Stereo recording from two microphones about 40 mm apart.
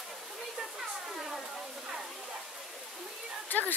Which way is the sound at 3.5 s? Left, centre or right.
Left.